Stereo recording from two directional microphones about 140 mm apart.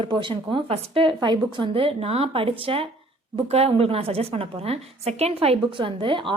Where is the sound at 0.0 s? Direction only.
35° right (ahead or behind).